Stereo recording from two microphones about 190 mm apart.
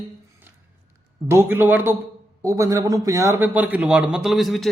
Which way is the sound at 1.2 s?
10° right (ahead or behind).